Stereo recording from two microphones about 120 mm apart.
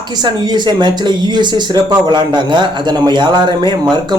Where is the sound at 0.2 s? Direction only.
40° right (ahead or behind).